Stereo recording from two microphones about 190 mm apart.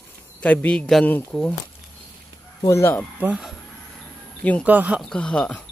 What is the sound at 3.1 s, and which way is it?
Speech, 5° right (ahead or behind).